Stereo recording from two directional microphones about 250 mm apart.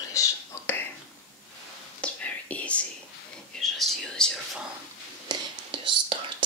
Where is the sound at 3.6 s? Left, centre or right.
Centre.